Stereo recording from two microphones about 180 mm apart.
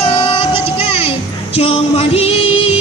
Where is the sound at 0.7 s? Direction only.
30° left (ahead or behind).